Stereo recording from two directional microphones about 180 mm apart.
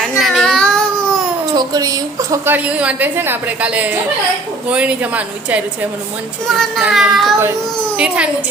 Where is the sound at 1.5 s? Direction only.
20° right (ahead or behind).